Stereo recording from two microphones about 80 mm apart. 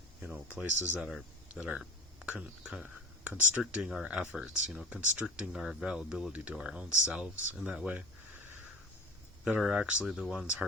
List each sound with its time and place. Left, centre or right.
0.2 s speech: centre
1.8 s a sound: centre
2.3 s speech: centre
3.6 s speech: centre
9.6 s speech: centre